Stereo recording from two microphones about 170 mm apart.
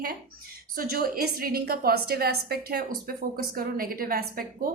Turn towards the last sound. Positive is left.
turn(degrees=-60)  # may be behind; listen again after turning